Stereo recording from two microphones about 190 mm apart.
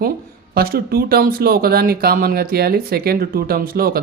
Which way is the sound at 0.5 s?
50° right (ahead or behind).